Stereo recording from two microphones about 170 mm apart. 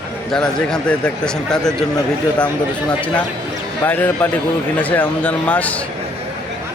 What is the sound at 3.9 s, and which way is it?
Speech, 10° left (ahead or behind).